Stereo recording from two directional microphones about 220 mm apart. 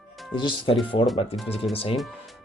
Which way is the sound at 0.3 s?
20° left (ahead or behind).